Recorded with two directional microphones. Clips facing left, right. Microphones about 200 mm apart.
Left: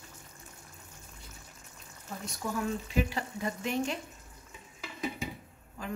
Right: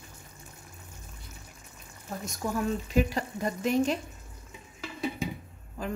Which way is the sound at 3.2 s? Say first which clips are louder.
Right 4 dB; 40° right (ahead or behind).